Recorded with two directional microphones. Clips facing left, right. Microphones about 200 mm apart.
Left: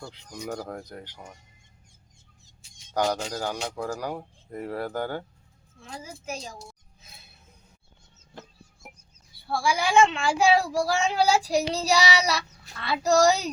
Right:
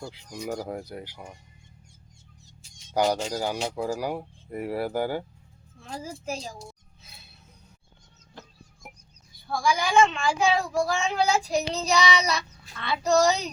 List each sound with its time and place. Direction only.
0.0 s speech: 10° right (ahead or behind)
2.9 s speech: 10° right (ahead or behind)
5.8 s a woman's voice: 35° right (ahead or behind)
9.5 s a child's voice: 5° left (ahead or behind)
10.2 s child singing: 35° left (ahead or behind)
12.8 s a child's voice: 5° left (ahead or behind)